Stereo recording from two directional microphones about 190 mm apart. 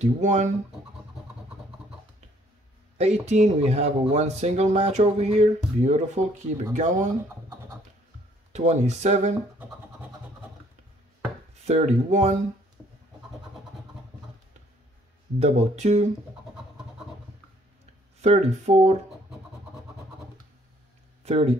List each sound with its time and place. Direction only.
0.0 s speech: 40° right (ahead or behind)
3.0 s speech: 35° right (ahead or behind)
8.5 s speech: 35° right (ahead or behind)
11.6 s speech: 35° right (ahead or behind)
15.3 s speech: 35° right (ahead or behind)
18.2 s speech: 35° right (ahead or behind)
21.2 s speech: 35° right (ahead or behind)